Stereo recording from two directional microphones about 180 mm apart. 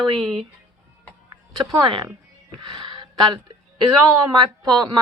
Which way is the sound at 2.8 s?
30° right (ahead or behind).